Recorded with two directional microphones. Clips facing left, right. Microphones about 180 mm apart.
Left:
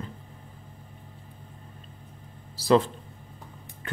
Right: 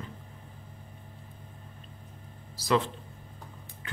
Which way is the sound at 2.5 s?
30° left (ahead or behind).